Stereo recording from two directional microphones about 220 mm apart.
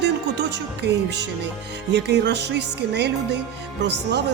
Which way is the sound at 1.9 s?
50° right (ahead or behind).